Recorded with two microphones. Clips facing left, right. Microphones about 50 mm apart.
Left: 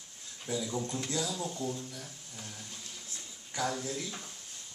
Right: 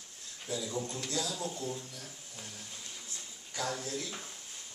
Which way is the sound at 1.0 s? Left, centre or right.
Centre.